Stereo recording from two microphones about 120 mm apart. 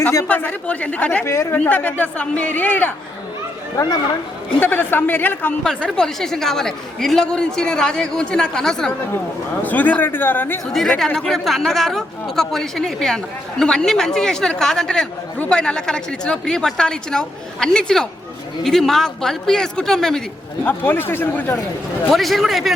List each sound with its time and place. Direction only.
0.3 s speech: 15° left (ahead or behind)
1.3 s speech: 25° left (ahead or behind)
1.5 s speech: 15° left (ahead or behind)
4.4 s speech: 15° left (ahead or behind)
5.6 s speech: 5° left (ahead or behind)
10.7 s speech: 5° left (ahead or behind)
20.7 s speech: 15° left (ahead or behind)
22.1 s speech: centre (ahead or behind)